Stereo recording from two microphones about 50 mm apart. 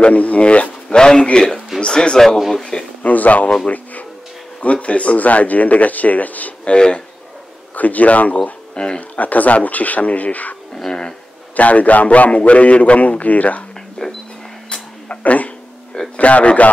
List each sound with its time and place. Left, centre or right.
0.0 s a man's voice: left; by 2.6 s centre
3.0 s speech: left
6.7 s a man's voice: centre
7.7 s speech: left
8.7 s speech: centre
9.1 s speech: left
10.7 s a sound: centre
11.5 s a man's voice: left
14.0 s a sound: centre
14.7 s a sound: left
16.2 s a man's voice: left